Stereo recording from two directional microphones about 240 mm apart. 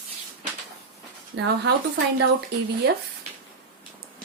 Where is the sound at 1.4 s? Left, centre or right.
Right.